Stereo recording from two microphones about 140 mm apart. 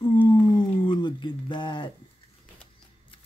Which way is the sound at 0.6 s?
35° left (ahead or behind).